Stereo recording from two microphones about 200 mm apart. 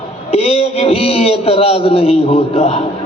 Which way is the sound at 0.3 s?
30° left (ahead or behind).